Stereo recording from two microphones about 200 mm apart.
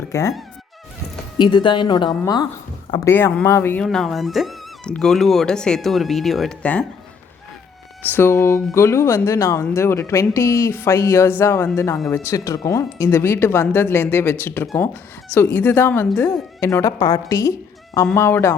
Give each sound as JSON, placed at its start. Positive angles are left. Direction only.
{"t": 0.1, "sound": "a woman's voice", "side_deg": 15}
{"t": 1.4, "sound": "a woman's voice", "side_deg": 20}
{"t": 3.8, "sound": "speech", "side_deg": 0}
{"t": 8.1, "sound": "a woman's voice", "side_deg": 10}